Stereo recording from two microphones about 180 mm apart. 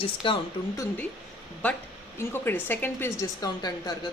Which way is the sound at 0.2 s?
30° left (ahead or behind).